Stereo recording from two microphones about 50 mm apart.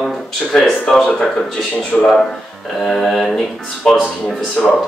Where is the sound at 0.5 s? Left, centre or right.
Centre.